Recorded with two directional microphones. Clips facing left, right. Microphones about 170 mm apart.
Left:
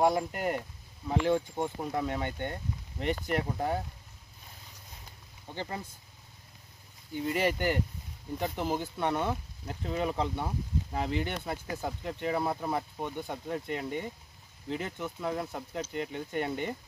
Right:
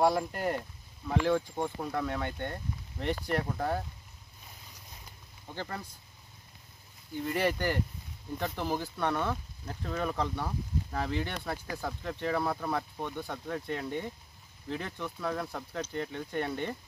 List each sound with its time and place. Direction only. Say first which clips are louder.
0.1 s speech: even; 5° left (ahead or behind)
5.5 s speech: left 1 dB; 20° left (ahead or behind)
7.2 s speech: left 1 dB; 10° left (ahead or behind)